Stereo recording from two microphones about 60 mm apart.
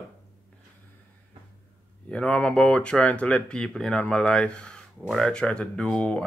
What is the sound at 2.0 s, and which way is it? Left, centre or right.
Speech, centre.